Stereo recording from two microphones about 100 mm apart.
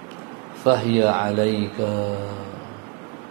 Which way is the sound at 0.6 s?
20° right (ahead or behind).